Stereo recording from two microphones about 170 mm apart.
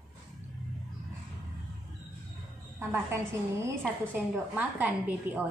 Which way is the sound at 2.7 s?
15° right (ahead or behind).